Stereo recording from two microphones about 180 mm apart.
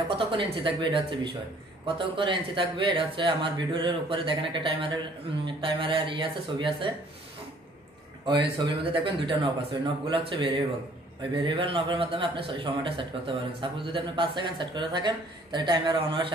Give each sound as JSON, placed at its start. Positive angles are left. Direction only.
{"t": 0.1, "sound": "speech", "side_deg": -30}
{"t": 8.8, "sound": "speech", "side_deg": -30}